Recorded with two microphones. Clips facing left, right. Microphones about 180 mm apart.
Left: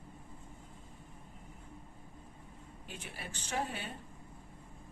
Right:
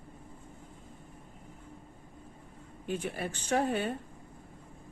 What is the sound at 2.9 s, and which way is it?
A woman's voice, 50° right (ahead or behind).